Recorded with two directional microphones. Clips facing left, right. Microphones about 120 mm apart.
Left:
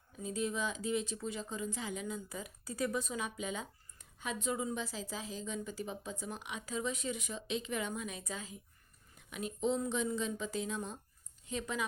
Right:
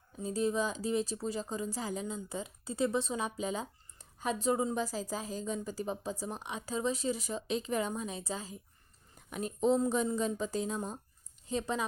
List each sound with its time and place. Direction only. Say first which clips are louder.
0.2 s speech: right 5 dB; 35° right (ahead or behind)